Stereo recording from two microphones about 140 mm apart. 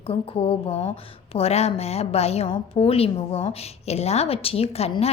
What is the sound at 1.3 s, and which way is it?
A woman's voice, 45° left (ahead or behind).